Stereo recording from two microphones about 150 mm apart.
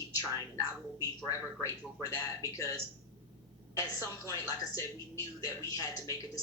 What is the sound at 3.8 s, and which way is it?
Speech, 20° left (ahead or behind).